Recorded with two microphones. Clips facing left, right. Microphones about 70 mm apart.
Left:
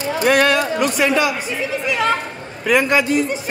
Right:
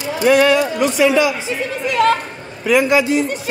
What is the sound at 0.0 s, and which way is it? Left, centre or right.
A man's voice, left.